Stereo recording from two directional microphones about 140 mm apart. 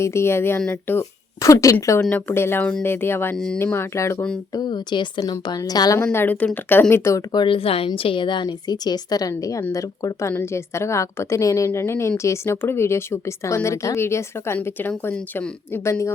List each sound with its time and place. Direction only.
0.0 s speech: 20° left (ahead or behind)
3.3 s speech: 5° left (ahead or behind)
3.6 s speech: 15° left (ahead or behind)
4.5 s a woman's voice: 30° left (ahead or behind)
7.3 s a woman's voice: 40° left (ahead or behind); by 16.1 s 20° left (ahead or behind)